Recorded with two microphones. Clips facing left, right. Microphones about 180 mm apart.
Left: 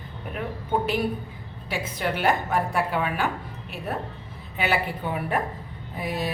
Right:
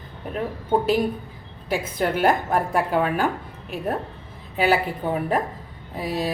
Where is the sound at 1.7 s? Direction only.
45° right (ahead or behind).